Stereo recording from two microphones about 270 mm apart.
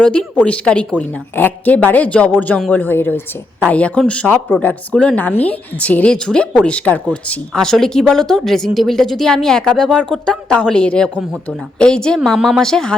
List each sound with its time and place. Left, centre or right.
0.0 s speech: centre